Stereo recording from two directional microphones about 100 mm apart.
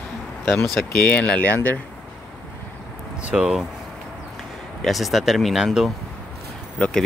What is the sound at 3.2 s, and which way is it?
Speech, 5° right (ahead or behind).